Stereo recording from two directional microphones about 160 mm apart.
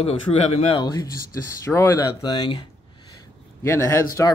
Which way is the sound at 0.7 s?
25° left (ahead or behind).